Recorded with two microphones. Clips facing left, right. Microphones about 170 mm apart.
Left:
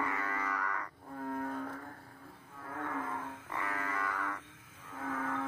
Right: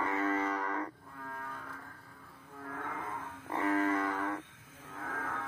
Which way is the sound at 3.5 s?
30° right (ahead or behind).